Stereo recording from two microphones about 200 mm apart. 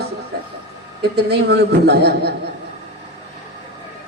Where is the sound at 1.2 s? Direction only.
55° right (ahead or behind).